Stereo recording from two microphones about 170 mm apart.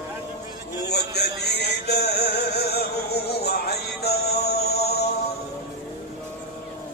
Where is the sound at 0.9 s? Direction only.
70° left (ahead or behind).